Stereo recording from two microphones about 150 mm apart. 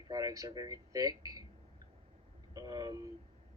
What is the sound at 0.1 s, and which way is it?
Speech, 25° right (ahead or behind).